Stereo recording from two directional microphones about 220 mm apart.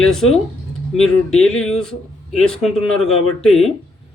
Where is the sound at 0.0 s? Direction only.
Centre (ahead or behind).